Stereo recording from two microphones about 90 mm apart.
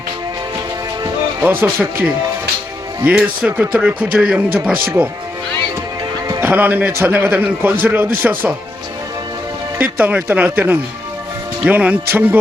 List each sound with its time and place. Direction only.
1.4 s a man's voice: 25° right (ahead or behind)
6.4 s a man's voice: 20° right (ahead or behind)
9.7 s a man's voice: 20° right (ahead or behind)